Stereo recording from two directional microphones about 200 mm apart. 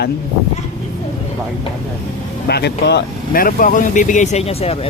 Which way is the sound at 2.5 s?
55° left (ahead or behind).